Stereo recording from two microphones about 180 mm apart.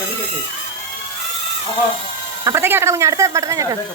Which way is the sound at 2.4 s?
15° right (ahead or behind).